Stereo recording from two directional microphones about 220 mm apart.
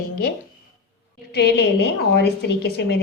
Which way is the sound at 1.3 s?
50° left (ahead or behind).